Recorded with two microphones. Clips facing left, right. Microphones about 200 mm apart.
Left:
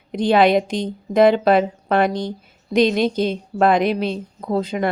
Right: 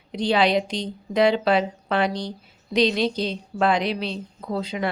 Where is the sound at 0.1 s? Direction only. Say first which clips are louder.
Left 5 dB; 50° left (ahead or behind).